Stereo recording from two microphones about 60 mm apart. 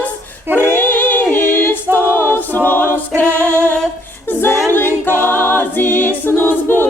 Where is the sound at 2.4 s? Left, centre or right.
Left.